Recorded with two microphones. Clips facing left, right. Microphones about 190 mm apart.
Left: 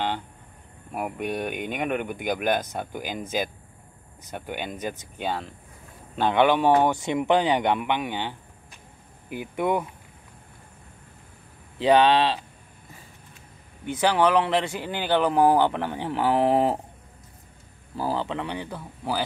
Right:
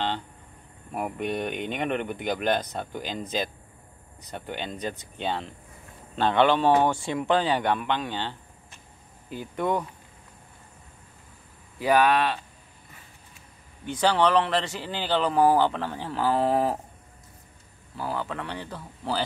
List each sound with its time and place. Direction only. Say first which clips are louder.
0.9 s speech: even; 5° left (ahead or behind)
11.8 s speech: left 3 dB; 25° left (ahead or behind)
13.8 s speech: left 1 dB; 10° left (ahead or behind)
17.9 s speech: left 4 dB; 30° left (ahead or behind)
18.4 s speech: left 3 dB; 15° left (ahead or behind)